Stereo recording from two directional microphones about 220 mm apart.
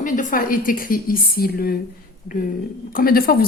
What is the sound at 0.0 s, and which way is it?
A woman's voice, 35° left (ahead or behind).